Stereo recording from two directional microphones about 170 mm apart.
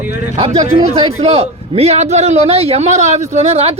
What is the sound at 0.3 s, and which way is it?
A man's voice, 40° right (ahead or behind).